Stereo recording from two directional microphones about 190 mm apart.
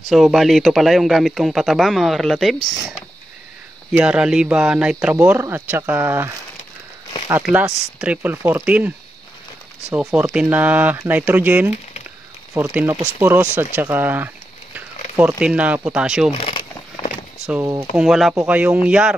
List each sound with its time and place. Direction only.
0.1 s a man's voice: centre (ahead or behind)
7.5 s speech: 5° right (ahead or behind)
9.9 s a man's voice: 5° right (ahead or behind)
16.3 s speech: 30° left (ahead or behind)
17.5 s speech: 15° right (ahead or behind)
17.9 s a man's voice: centre (ahead or behind)